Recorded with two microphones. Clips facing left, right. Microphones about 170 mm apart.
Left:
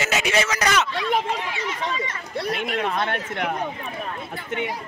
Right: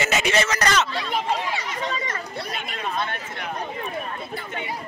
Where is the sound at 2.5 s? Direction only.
75° left (ahead or behind).